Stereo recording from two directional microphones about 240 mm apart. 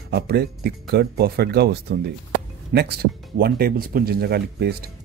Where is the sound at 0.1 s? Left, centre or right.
Right.